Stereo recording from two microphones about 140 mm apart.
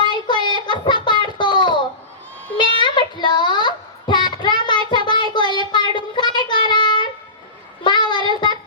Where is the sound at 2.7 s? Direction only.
35° left (ahead or behind).